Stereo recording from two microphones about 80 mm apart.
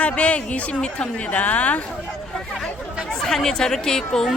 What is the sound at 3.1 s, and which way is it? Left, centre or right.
Speech, centre.